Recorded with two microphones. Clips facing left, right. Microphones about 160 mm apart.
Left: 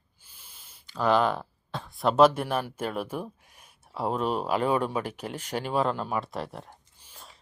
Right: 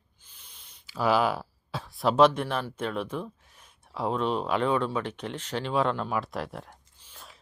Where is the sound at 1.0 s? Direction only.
5° right (ahead or behind).